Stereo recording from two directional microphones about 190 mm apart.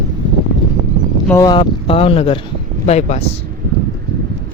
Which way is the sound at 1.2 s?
10° left (ahead or behind).